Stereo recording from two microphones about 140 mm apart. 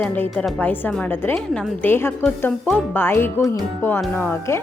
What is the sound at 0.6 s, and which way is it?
A woman's voice, 15° left (ahead or behind).